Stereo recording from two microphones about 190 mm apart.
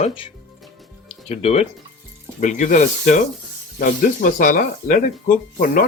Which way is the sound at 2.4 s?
40° left (ahead or behind).